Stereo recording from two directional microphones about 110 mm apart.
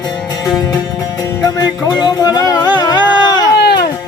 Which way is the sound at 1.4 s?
35° left (ahead or behind).